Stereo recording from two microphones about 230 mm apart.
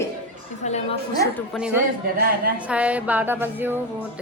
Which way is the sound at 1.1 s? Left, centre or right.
Centre.